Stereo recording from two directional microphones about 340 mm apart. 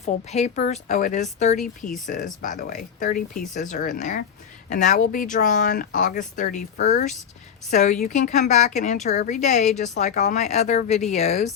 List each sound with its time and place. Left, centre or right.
0.0 s speech: centre